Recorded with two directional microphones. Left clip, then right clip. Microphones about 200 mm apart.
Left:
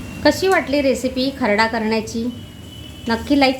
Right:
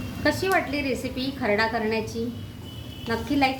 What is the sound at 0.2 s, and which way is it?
A woman's voice, 55° left (ahead or behind).